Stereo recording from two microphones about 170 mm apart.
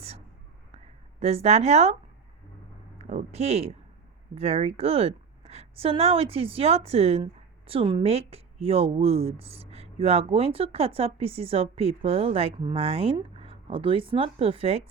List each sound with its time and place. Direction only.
1.2 s speech: 40° right (ahead or behind)
3.0 s speech: 40° right (ahead or behind)